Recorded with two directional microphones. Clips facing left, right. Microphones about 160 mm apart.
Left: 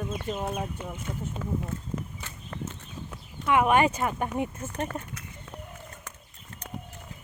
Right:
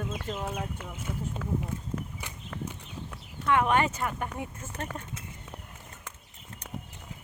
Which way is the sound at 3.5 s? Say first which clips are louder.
Left 3 dB; 15° left (ahead or behind).